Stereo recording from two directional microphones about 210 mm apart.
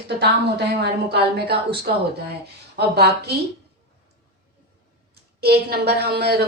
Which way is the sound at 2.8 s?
50° right (ahead or behind).